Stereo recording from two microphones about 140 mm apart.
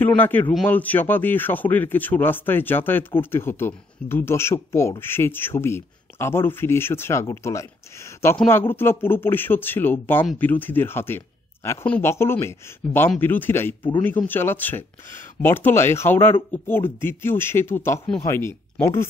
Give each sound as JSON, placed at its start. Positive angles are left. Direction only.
{"t": 0.0, "sound": "speech", "side_deg": 15}